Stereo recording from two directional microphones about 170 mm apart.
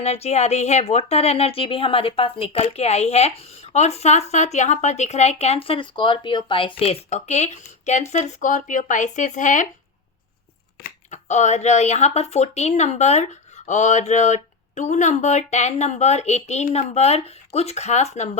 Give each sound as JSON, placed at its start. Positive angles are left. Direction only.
{"t": 0.0, "sound": "a woman's voice", "side_deg": 40}
{"t": 10.8, "sound": "a woman's voice", "side_deg": 45}